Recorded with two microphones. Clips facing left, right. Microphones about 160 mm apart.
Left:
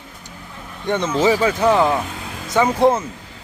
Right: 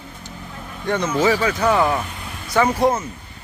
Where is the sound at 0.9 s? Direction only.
20° left (ahead or behind).